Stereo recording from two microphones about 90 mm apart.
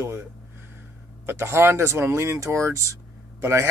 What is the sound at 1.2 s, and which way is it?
Speech, 25° right (ahead or behind).